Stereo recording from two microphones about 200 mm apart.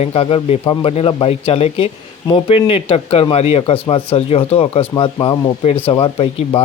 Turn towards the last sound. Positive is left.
turn(degrees=30)  # may be behind; listen again after turning